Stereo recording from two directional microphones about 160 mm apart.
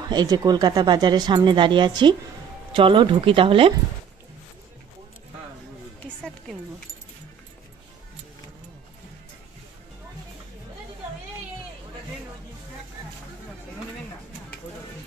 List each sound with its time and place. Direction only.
0.1 s speech: 25° right (ahead or behind)